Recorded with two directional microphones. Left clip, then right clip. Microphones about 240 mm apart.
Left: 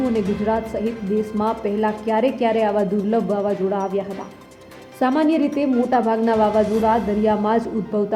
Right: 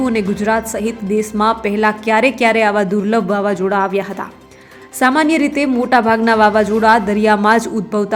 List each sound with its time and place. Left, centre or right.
0.1 s a woman's voice: centre
3.4 s music: right
4.9 s a woman's voice: centre